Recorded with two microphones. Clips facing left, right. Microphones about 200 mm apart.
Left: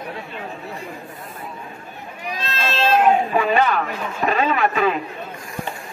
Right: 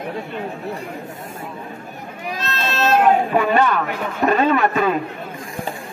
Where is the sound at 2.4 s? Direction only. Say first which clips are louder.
Even; 50° right (ahead or behind).